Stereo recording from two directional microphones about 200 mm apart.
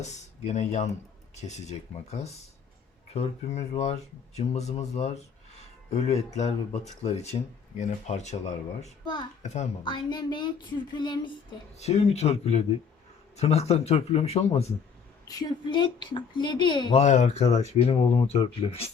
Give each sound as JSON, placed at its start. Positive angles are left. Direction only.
{"t": 0.0, "sound": "speech", "side_deg": 35}
{"t": 9.4, "sound": "a child's voice", "side_deg": 35}
{"t": 9.8, "sound": "a woman's voice", "side_deg": 20}
{"t": 11.8, "sound": "speech", "side_deg": 30}
{"t": 15.3, "sound": "a woman's voice", "side_deg": 20}
{"t": 17.0, "sound": "speech", "side_deg": 35}